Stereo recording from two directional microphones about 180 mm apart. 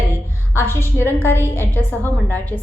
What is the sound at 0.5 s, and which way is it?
A woman's voice, 15° left (ahead or behind).